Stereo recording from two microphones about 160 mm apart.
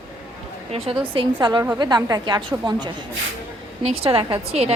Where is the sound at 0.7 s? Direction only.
35° right (ahead or behind).